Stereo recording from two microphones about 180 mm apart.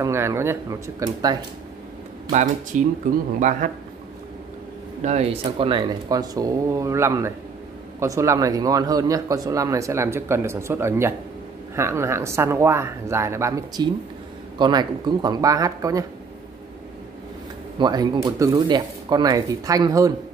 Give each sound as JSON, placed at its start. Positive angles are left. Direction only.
{"t": 0.0, "sound": "speech", "side_deg": -15}
{"t": 2.3, "sound": "speech", "side_deg": -45}
{"t": 5.0, "sound": "speech", "side_deg": -35}
{"t": 17.7, "sound": "speech", "side_deg": -25}